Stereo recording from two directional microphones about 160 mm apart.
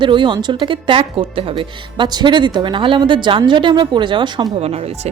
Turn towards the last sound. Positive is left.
turn(degrees=-40)  # may be behind; listen again after turning